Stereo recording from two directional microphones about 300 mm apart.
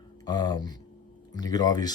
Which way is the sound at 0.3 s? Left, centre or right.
Centre.